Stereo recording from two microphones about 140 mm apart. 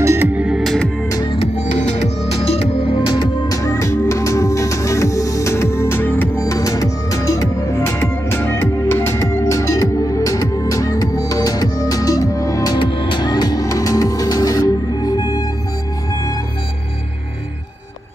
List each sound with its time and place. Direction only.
0.0 s music: 15° right (ahead or behind); by 0.8 s centre (ahead or behind)
1.0 s music: 30° left (ahead or behind)
1.6 s music: 60° left (ahead or behind); by 3.0 s 45° left (ahead or behind)
3.1 s music: 30° left (ahead or behind)
12.7 s music: 35° left (ahead or behind)